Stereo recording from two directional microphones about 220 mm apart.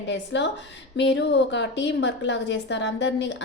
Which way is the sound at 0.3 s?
55° left (ahead or behind).